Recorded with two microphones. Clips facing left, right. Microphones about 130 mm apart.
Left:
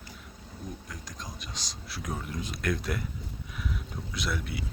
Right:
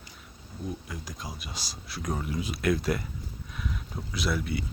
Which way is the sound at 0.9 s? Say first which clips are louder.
Right 3 dB; 5° right (ahead or behind).